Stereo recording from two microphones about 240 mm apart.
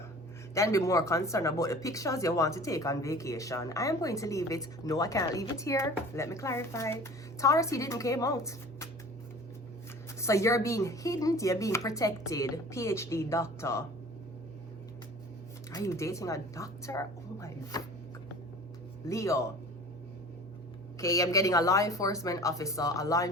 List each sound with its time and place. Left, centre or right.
0.5 s speech: centre
10.2 s speech: centre
15.7 s speech: centre
19.0 s speech: centre
21.0 s speech: centre